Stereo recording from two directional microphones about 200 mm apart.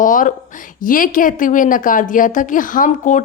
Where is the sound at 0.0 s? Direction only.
40° left (ahead or behind).